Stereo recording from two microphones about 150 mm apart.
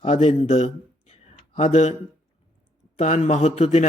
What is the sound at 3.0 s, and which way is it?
Speech, 50° left (ahead or behind).